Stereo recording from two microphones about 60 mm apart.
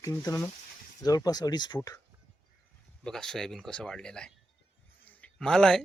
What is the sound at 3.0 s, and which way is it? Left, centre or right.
Speech, centre.